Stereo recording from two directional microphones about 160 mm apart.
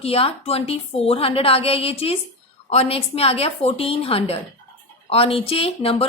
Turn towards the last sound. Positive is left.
turn(degrees=35)  # may be behind; listen again after turning